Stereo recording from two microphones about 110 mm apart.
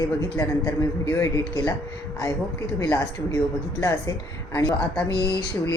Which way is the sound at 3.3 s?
30° left (ahead or behind).